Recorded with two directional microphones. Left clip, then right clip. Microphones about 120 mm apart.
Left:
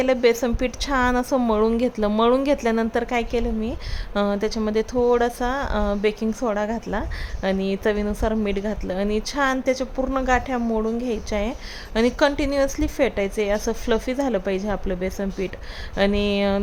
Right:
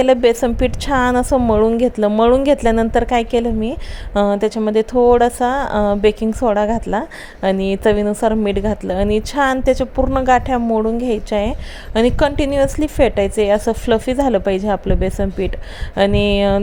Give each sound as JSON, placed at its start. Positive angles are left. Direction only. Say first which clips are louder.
{"t": 0.0, "sound": "a woman's voice", "louder": "right 6 dB", "side_deg": -35}
{"t": 1.4, "sound": "speech", "louder": "right 6 dB", "side_deg": -25}
{"t": 2.4, "sound": "a woman's voice", "louder": "right 7 dB", "side_deg": -40}
{"t": 10.0, "sound": "speech", "louder": "right 7 dB", "side_deg": -25}
{"t": 10.2, "sound": "a woman's voice", "louder": "right 8 dB", "side_deg": -45}
{"t": 10.7, "sound": "a woman's voice", "louder": "right 7 dB", "side_deg": -35}